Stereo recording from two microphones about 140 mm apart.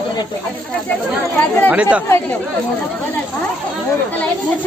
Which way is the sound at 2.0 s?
20° left (ahead or behind).